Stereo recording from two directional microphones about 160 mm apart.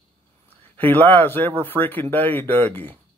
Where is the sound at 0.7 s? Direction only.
10° left (ahead or behind).